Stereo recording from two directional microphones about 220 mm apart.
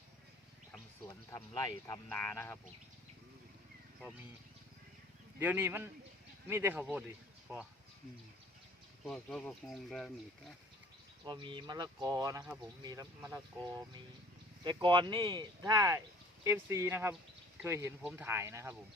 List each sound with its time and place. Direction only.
1.3 s speech: 10° left (ahead or behind)
5.4 s speech: 10° right (ahead or behind)
9.0 s speech: 5° left (ahead or behind)
11.3 s speech: 20° right (ahead or behind)
14.6 s speech: 20° right (ahead or behind)